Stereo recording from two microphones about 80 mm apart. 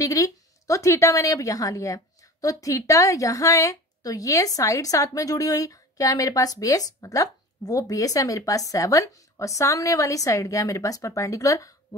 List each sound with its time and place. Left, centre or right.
0.0 s a woman's voice: left